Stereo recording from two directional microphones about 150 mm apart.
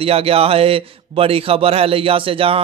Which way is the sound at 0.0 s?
40° right (ahead or behind).